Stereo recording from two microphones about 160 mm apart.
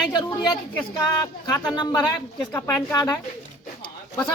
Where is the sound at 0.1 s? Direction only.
25° left (ahead or behind).